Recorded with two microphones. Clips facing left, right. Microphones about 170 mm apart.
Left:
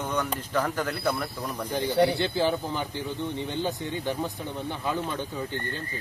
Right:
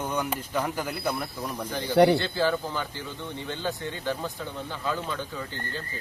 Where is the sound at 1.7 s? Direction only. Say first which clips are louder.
Right 4 dB; 15° left (ahead or behind).